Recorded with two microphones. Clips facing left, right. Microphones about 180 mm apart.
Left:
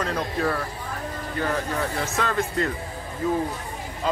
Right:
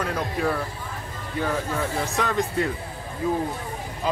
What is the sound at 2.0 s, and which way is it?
Speech, 15° right (ahead or behind).